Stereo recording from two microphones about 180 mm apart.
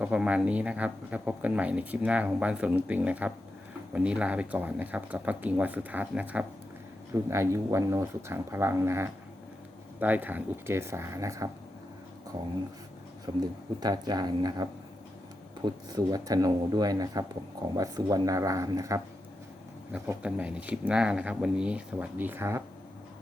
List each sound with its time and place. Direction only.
0.0 s speech: 5° right (ahead or behind)
13.3 s speech: 25° right (ahead or behind)
19.9 s speech: 5° right (ahead or behind)